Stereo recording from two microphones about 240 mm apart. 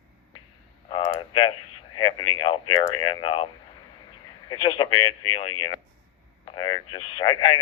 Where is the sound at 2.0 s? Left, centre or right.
Centre.